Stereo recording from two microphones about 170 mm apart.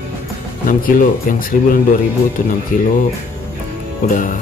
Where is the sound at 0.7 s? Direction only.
55° left (ahead or behind).